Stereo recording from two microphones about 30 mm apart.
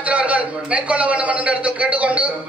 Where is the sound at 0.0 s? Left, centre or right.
Right.